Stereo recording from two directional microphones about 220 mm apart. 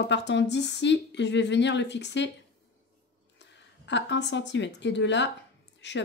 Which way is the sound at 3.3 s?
55° left (ahead or behind).